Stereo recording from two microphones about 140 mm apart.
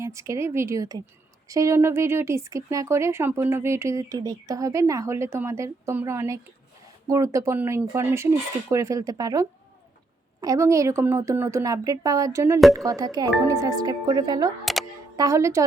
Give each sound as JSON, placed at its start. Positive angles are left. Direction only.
{"t": 0.0, "sound": "speech", "side_deg": -20}
{"t": 14.6, "sound": "a sound", "side_deg": 0}
{"t": 15.1, "sound": "speech", "side_deg": -25}